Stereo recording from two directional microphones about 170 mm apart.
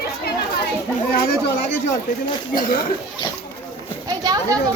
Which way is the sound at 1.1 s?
80° left.